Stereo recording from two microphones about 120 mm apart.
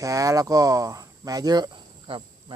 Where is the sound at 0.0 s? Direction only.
30° right (ahead or behind).